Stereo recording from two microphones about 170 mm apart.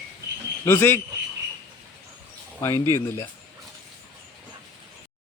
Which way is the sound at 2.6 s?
15° left (ahead or behind).